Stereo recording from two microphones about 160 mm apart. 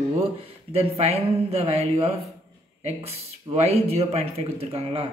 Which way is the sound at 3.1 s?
40° right (ahead or behind).